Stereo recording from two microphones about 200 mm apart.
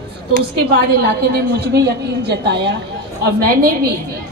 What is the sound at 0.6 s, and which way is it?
A woman's voice, 55° right (ahead or behind).